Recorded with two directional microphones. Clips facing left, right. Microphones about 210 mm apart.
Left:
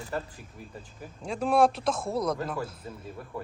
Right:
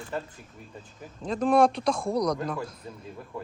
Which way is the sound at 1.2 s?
10° left (ahead or behind).